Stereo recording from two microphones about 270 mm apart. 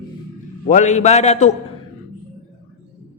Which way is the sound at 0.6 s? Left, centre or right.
Left.